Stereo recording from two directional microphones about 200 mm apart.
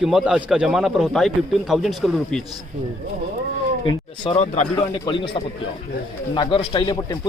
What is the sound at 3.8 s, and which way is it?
Speech, 25° left (ahead or behind).